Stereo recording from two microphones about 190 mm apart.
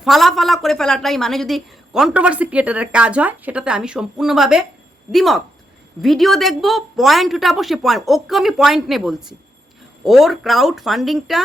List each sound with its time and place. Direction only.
0.0 s a woman's voice: centre (ahead or behind)